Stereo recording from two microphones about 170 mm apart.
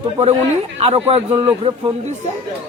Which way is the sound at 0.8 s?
35° right (ahead or behind).